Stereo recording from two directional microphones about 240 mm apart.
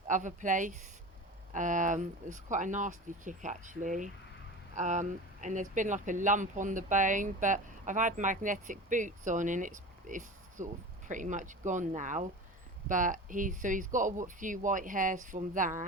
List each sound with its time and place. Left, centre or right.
0.1 s speech: right